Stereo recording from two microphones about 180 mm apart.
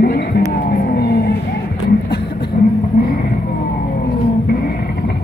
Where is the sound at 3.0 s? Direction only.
50° left (ahead or behind).